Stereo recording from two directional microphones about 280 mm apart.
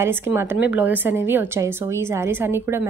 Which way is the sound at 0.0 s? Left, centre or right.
Centre.